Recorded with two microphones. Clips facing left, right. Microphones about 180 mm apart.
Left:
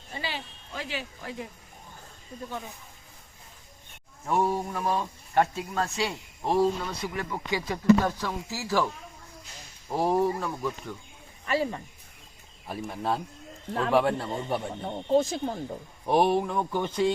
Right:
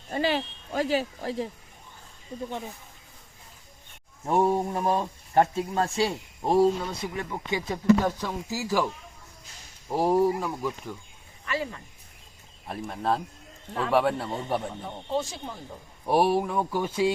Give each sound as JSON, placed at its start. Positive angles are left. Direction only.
{"t": 0.1, "sound": "speech", "side_deg": -50}
{"t": 4.3, "sound": "speech", "side_deg": -35}
{"t": 9.9, "sound": "speech", "side_deg": -10}
{"t": 11.4, "sound": "speech", "side_deg": 35}
{"t": 12.9, "sound": "speech", "side_deg": 0}
{"t": 14.8, "sound": "speech", "side_deg": 45}
{"t": 16.0, "sound": "speech", "side_deg": -5}